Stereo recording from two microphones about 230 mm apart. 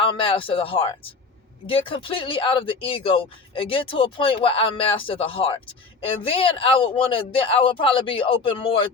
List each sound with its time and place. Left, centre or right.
0.0 s speech: left